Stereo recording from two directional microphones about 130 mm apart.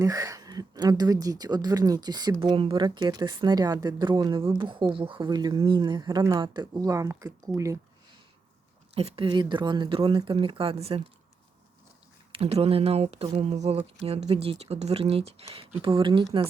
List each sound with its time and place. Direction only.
0.0 s speech: 25° right (ahead or behind)
9.0 s speech: 45° right (ahead or behind)
12.3 s speech: 50° right (ahead or behind)